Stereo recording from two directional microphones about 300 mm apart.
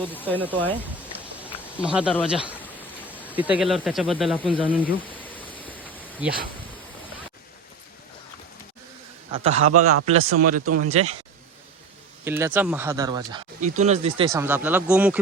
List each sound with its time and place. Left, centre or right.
0.1 s speech: centre
0.3 s speech: centre
1.5 s a sound: centre
3.1 s speech: centre
5.2 s a sound: centre
6.2 s speech: centre
9.3 s speech: centre
9.6 s a man's voice: right
10.1 s speech: right
12.2 s speech: centre